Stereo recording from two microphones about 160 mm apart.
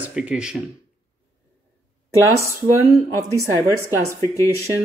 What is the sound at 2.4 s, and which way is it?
Speech, 15° right (ahead or behind).